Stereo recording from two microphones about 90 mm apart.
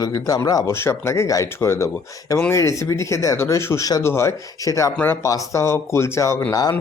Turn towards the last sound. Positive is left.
turn(degrees=45)  # may be behind; listen again after turning